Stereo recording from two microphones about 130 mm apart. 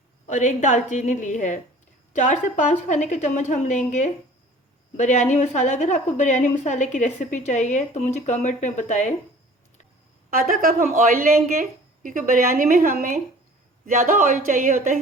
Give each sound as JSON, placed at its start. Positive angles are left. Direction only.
{"t": 0.3, "sound": "a woman's voice", "side_deg": 70}
{"t": 10.2, "sound": "speech", "side_deg": -90}